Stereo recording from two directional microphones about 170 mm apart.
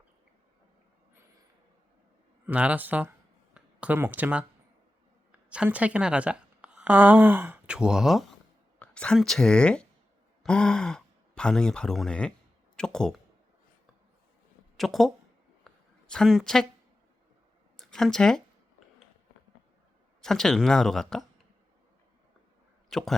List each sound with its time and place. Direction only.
2.5 s speech: 10° right (ahead or behind)
3.5 s a sound: 10° right (ahead or behind)
5.3 s a woman's voice: 10° right (ahead or behind)
14.8 s speech: centre (ahead or behind)
15.6 s a sound: 5° left (ahead or behind)
17.7 s speech: centre (ahead or behind)
20.2 s speech: centre (ahead or behind)
22.9 s speech: centre (ahead or behind)